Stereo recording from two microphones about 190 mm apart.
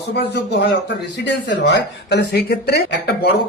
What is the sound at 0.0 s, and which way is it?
Speech, 60° left (ahead or behind).